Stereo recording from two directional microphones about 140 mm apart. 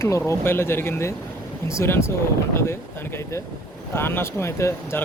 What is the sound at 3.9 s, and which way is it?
Speech, 15° left (ahead or behind).